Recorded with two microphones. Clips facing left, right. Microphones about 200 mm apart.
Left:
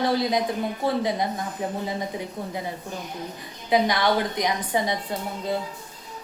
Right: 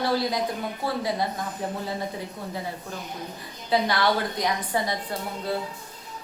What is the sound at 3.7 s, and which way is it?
A woman's voice, 15° left (ahead or behind).